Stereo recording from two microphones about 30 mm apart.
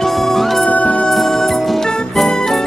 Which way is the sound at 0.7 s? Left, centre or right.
Left.